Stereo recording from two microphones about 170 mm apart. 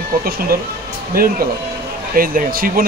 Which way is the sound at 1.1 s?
60° right (ahead or behind).